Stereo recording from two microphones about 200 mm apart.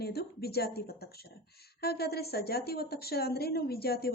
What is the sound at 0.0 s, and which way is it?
A woman's voice, 55° left (ahead or behind).